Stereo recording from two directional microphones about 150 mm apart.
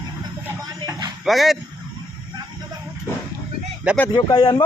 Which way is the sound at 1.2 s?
Centre (ahead or behind).